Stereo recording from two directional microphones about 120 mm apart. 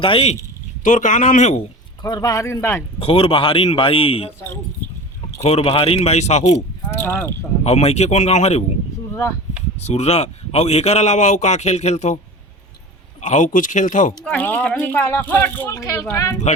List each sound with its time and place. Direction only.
0.0 s a man's voice: 55° left (ahead or behind)
0.9 s a man's voice: 90° left
2.0 s speech: 30° left (ahead or behind)
3.0 s a man's voice: 50° left (ahead or behind)
5.4 s speech: 60° left (ahead or behind)
6.8 s speech: 15° left (ahead or behind)
7.6 s speech: 65° left (ahead or behind)
9.8 s speech: 65° left (ahead or behind)
13.2 s a man's voice: 90° left
14.3 s speech: 15° left (ahead or behind)